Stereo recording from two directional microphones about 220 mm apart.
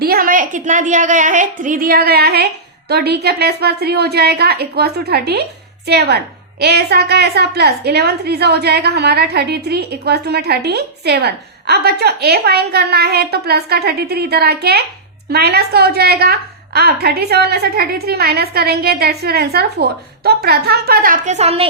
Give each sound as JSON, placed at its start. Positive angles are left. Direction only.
{"t": 0.0, "sound": "a woman's voice", "side_deg": -40}